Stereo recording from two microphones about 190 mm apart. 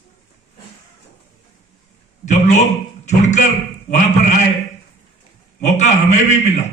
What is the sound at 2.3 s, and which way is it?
A man's voice, 40° left (ahead or behind).